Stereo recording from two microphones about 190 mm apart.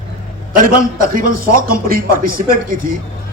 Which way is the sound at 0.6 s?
50° right (ahead or behind).